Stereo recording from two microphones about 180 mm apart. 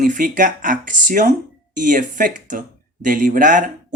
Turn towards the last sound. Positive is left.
turn(degrees=-50)  # may be behind; listen again after turning